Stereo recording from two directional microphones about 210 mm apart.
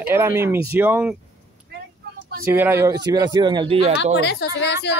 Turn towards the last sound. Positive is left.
turn(degrees=55)  # may be behind; listen again after turning